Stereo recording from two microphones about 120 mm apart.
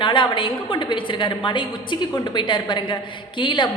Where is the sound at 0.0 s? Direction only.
45° left (ahead or behind).